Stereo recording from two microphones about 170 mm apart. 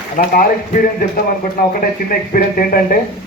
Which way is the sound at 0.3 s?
55° left (ahead or behind).